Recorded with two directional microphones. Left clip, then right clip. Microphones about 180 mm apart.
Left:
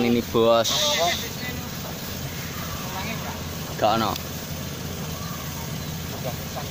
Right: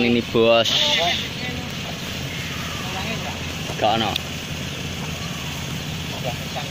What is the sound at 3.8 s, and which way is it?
Speech, 25° left (ahead or behind).